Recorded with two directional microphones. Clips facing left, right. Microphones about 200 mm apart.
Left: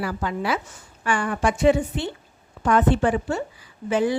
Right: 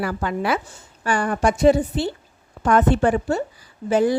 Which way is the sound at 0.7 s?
35° right (ahead or behind).